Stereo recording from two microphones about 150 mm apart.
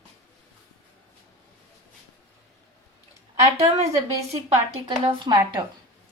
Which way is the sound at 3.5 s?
45° right (ahead or behind).